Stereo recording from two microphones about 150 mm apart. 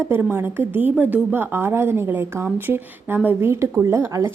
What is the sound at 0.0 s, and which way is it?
A woman's voice, 15° right (ahead or behind).